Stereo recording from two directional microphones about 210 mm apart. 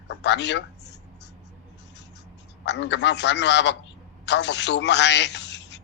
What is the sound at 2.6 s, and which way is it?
A man's voice, 55° left (ahead or behind).